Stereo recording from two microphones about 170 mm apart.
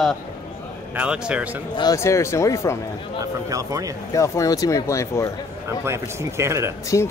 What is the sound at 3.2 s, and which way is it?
Speech, 20° right (ahead or behind).